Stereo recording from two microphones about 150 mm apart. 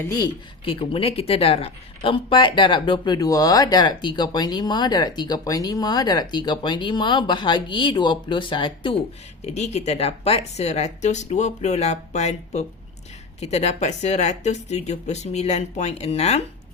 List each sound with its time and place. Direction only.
0.0 s speech: 20° left (ahead or behind)
0.6 s speech: 35° left (ahead or behind)
9.4 s speech: 45° left (ahead or behind)